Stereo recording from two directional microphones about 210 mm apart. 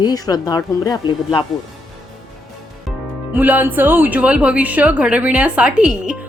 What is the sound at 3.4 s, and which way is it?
A woman's voice, 10° right (ahead or behind).